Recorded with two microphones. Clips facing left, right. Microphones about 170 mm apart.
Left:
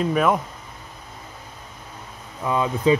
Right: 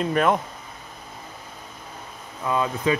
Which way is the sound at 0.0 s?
5° left (ahead or behind).